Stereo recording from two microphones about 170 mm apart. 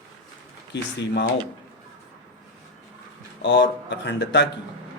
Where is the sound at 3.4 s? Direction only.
90° left.